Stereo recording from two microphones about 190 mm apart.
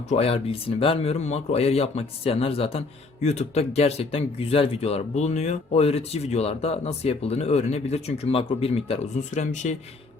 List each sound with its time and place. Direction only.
0.1 s a man's voice: 30° left (ahead or behind)